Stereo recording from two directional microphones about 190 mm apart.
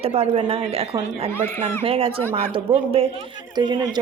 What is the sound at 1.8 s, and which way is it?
Speech, 30° right (ahead or behind).